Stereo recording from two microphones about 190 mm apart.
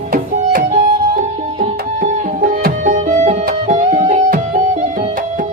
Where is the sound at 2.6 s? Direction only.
45° right (ahead or behind).